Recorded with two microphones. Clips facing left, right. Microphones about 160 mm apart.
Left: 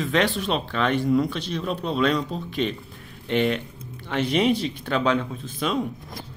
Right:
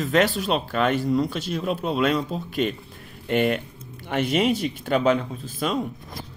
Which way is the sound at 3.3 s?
50° right (ahead or behind).